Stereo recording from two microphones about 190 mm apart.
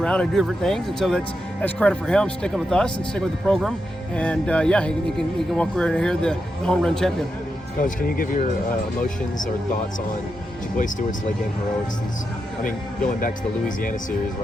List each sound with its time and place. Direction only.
0.0 s speech: 5° left (ahead or behind)
7.8 s speech: 45° left (ahead or behind)
13.1 s speech: 45° left (ahead or behind)